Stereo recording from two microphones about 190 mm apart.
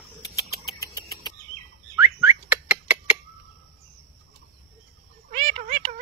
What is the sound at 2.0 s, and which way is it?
Whistling, 15° right (ahead or behind).